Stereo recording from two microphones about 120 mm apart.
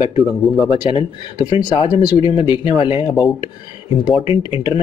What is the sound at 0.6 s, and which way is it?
Speech, 45° left (ahead or behind).